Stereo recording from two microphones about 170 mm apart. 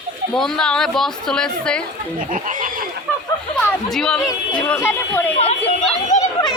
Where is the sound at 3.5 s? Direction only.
5° left (ahead or behind).